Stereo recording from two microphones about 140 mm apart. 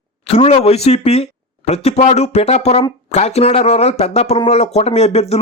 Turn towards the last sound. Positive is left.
turn(degrees=50)  # may be behind; listen again after turning